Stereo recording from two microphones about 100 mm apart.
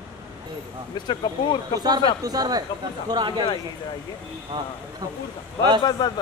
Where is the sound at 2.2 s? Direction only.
40° right (ahead or behind).